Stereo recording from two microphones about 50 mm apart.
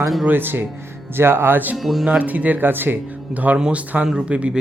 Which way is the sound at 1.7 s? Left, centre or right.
Centre.